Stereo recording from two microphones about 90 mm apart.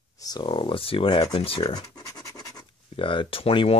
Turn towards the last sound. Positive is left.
turn(degrees=85)